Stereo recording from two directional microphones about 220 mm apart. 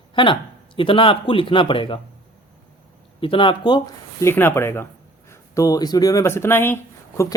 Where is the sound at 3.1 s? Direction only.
25° left (ahead or behind).